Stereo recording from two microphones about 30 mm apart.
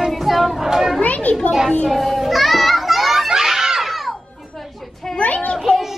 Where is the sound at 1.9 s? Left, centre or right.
Centre.